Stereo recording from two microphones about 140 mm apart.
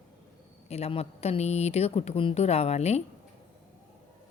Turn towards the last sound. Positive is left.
turn(degrees=50)  # may be behind; listen again after turning